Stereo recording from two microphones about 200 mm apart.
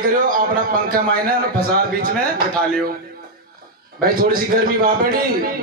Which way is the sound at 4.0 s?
45° right (ahead or behind).